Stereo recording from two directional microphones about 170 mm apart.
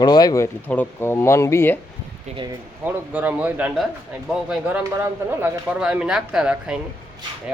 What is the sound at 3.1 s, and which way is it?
A man's voice, 10° right (ahead or behind).